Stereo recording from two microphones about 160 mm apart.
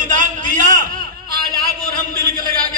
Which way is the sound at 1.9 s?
65° right (ahead or behind).